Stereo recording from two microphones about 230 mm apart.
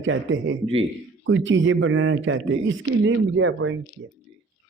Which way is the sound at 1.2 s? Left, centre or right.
Right.